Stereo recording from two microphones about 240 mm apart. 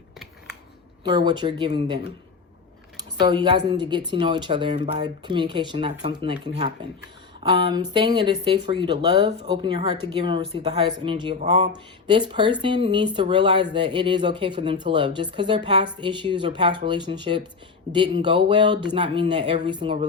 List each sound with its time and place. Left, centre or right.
1.0 s speech: centre
3.2 s speech: centre